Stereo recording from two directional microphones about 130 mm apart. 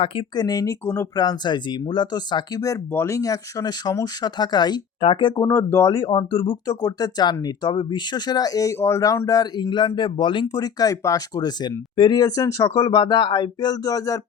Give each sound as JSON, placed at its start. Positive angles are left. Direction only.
{"t": 0.0, "sound": "speech", "side_deg": 40}
{"t": 5.3, "sound": "speech", "side_deg": 20}
{"t": 5.9, "sound": "speech", "side_deg": 35}